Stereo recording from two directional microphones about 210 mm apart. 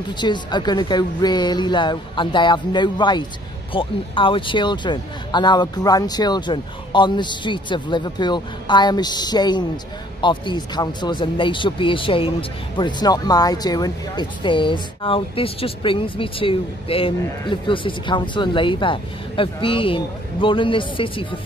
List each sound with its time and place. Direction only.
0.2 s speech: 20° left (ahead or behind)